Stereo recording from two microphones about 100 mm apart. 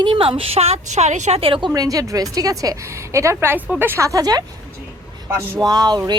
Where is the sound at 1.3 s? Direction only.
65° right (ahead or behind).